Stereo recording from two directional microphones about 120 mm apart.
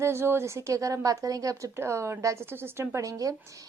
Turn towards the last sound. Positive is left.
turn(degrees=-25)  # may be behind; listen again after turning